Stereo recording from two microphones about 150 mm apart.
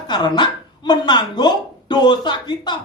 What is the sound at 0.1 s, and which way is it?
Speech, 30° left (ahead or behind).